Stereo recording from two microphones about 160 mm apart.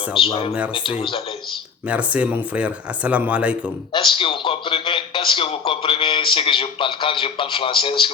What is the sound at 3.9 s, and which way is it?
Speech, 30° left (ahead or behind).